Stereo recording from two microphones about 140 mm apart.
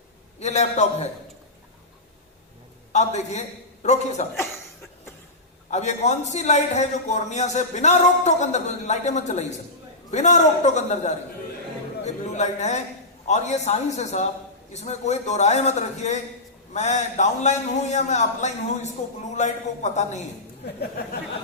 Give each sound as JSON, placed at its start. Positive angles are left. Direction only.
{"t": 0.3, "sound": "a man's voice", "side_deg": 50}
{"t": 2.9, "sound": "a man's voice", "side_deg": 55}
{"t": 5.7, "sound": "a man's voice", "side_deg": 55}